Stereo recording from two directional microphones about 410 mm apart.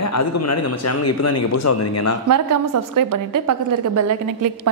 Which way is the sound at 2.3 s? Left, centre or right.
Right.